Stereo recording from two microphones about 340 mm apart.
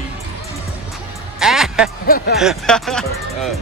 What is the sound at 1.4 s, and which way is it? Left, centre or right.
Music, centre.